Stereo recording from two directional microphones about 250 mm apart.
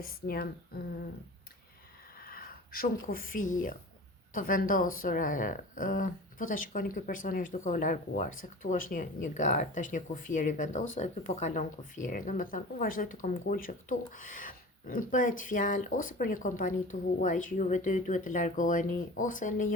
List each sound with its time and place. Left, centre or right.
0.0 s speech: left
2.2 s speech: left